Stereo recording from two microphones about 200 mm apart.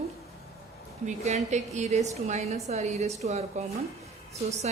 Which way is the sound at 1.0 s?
35° right (ahead or behind).